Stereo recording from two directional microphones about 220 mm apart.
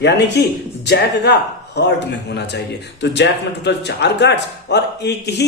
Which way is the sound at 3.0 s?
50° left (ahead or behind).